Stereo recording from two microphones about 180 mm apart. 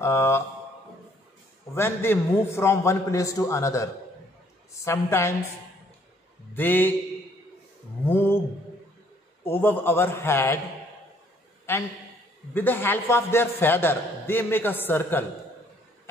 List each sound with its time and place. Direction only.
0.0 s a man's voice: 15° left (ahead or behind)
1.8 s a man's voice: 10° left (ahead or behind)
6.5 s a man's voice: 10° left (ahead or behind)
8.0 s a man's voice: 10° left (ahead or behind)
9.4 s a man's voice: 10° left (ahead or behind)
11.7 s a man's voice: 15° left (ahead or behind)